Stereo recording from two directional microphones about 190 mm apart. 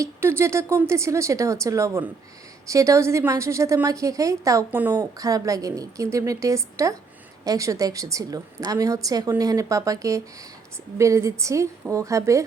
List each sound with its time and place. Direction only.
0.0 s a woman's voice: 10° right (ahead or behind)